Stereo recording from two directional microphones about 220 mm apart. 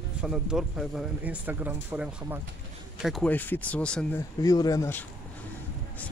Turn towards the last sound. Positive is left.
turn(degrees=10)  # may be behind; listen again after turning